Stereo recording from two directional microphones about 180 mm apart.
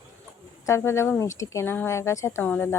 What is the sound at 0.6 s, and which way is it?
A woman's voice, 15° left (ahead or behind).